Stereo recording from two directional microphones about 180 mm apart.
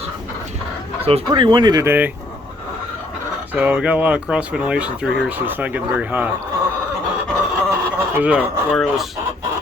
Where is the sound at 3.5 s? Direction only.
10° right (ahead or behind).